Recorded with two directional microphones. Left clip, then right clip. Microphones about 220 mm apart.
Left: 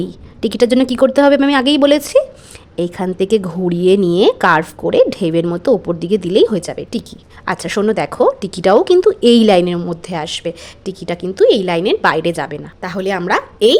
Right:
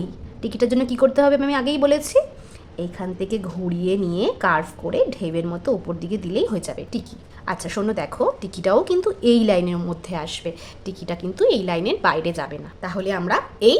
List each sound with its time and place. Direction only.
0.4 s a woman's voice: 40° left (ahead or behind)